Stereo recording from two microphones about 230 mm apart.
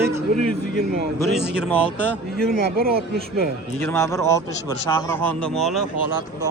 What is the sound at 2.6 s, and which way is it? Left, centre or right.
Speech, right.